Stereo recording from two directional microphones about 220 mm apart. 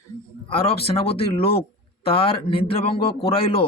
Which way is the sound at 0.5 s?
25° left (ahead or behind).